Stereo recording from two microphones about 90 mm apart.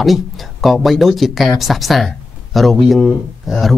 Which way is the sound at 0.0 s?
Centre (ahead or behind).